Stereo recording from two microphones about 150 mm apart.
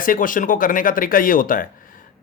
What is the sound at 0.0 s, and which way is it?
Speech, 65° left (ahead or behind).